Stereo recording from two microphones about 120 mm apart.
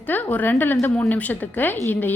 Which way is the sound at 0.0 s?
15° left (ahead or behind).